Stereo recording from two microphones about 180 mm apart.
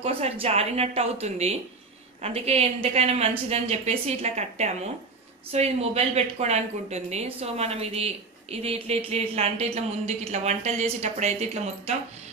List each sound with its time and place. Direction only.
0.0 s speech: 35° right (ahead or behind)